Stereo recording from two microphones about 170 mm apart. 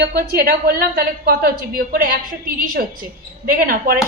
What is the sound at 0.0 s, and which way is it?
A woman's voice, 65° right (ahead or behind).